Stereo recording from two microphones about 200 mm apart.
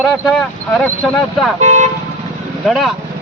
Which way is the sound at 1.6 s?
35° right (ahead or behind).